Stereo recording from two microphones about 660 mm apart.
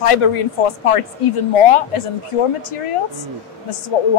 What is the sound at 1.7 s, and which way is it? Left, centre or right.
A woman's voice, left.